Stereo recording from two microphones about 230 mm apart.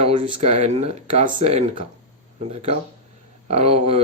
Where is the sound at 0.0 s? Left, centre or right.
Right.